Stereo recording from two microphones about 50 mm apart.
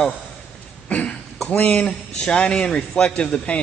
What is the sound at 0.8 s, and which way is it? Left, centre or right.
Cough, left.